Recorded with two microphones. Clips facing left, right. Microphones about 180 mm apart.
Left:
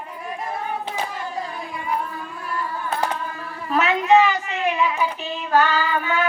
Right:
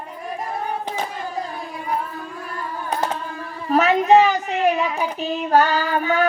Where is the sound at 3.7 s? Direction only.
40° right (ahead or behind).